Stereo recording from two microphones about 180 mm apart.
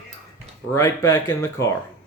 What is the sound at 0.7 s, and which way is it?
Speech, 20° left (ahead or behind).